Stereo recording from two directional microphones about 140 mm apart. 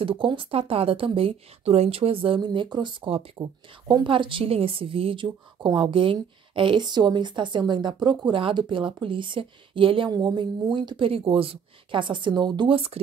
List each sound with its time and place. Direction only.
0.0 s a woman's voice: 40° right (ahead or behind)